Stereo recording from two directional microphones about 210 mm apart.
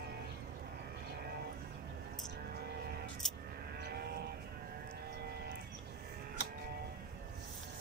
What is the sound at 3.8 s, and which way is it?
Sheep, 50° right (ahead or behind).